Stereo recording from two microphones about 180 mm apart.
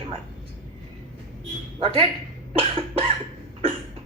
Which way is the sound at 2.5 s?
30° right (ahead or behind).